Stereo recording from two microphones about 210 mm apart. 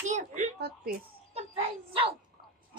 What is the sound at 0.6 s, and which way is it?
Speech, 50° right (ahead or behind).